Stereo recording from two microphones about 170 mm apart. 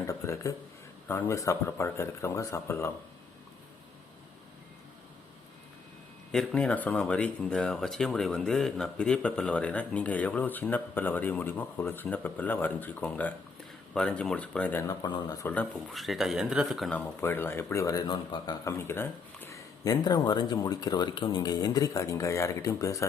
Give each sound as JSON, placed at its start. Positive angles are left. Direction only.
{"t": 0.1, "sound": "a sound", "side_deg": 15}
{"t": 1.0, "sound": "speech", "side_deg": 15}
{"t": 6.3, "sound": "speech", "side_deg": 5}
{"t": 15.9, "sound": "speech", "side_deg": 0}
{"t": 17.0, "sound": "speech", "side_deg": 10}
{"t": 18.9, "sound": "speech", "side_deg": 15}